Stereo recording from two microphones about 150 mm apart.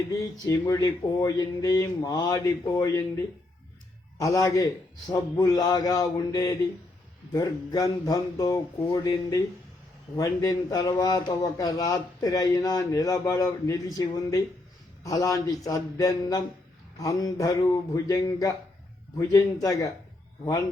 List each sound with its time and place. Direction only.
0.1 s speech: 25° left (ahead or behind)
10.2 s speech: 25° left (ahead or behind)